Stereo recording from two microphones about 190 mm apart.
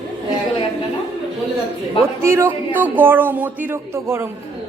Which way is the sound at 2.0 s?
15° right (ahead or behind).